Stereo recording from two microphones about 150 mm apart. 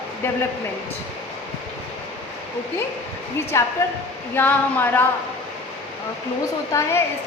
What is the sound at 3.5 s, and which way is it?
A woman's voice, 20° left (ahead or behind).